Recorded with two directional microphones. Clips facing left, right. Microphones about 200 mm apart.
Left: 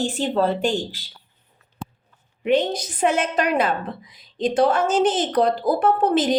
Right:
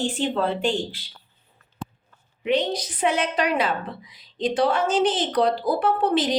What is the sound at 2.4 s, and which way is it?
Speech, 50° left (ahead or behind).